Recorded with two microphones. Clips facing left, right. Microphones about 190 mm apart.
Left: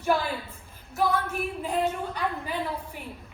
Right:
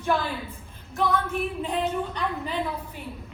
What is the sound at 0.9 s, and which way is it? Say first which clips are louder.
Female singing: even; centre (ahead or behind).